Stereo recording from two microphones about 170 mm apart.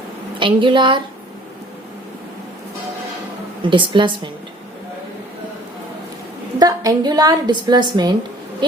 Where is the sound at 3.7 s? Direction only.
30° right (ahead or behind).